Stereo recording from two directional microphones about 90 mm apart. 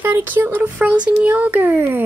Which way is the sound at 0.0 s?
20° right (ahead or behind).